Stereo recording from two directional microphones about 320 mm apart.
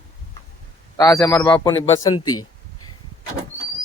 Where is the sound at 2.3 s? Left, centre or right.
Left.